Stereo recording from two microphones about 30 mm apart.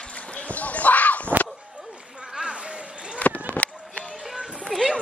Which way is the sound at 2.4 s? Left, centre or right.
Right.